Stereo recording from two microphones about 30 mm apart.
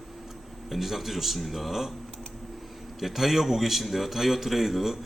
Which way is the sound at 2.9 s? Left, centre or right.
Centre.